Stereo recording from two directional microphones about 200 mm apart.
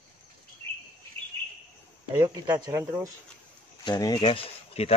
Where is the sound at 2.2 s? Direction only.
20° right (ahead or behind).